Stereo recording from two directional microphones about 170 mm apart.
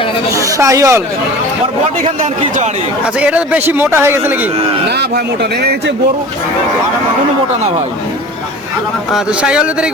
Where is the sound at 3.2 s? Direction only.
10° right (ahead or behind).